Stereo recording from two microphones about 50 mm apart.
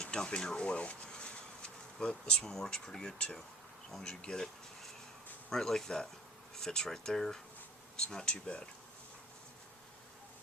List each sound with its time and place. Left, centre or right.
0.0 s speech: centre
5.5 s speech: centre